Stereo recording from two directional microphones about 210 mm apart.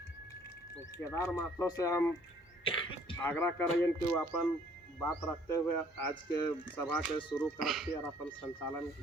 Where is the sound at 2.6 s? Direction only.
25° left (ahead or behind).